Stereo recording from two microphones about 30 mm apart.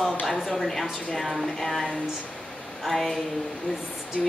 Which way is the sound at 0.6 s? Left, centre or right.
Centre.